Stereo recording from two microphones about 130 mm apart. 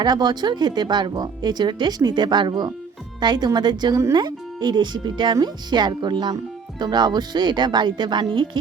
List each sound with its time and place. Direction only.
0.0 s speech: 35° right (ahead or behind)